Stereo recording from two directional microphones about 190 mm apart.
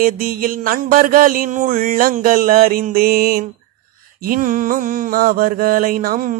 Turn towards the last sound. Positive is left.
turn(degrees=-45)  # may be behind; listen again after turning